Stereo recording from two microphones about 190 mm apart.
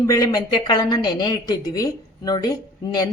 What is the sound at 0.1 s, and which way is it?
A woman's voice, 20° left (ahead or behind).